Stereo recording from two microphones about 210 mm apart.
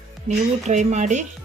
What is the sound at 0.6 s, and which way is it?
Speech, 35° right (ahead or behind).